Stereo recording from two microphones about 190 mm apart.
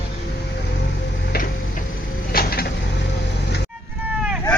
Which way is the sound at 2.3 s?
50° left (ahead or behind).